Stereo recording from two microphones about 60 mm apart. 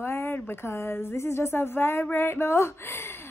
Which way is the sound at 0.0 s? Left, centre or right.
Left.